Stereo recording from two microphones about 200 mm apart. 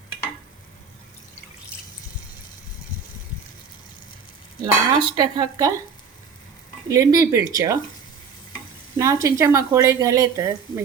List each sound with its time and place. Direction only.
4.6 s dishes: 20° right (ahead or behind)
6.8 s speech: 15° right (ahead or behind)
9.0 s speech: 15° right (ahead or behind)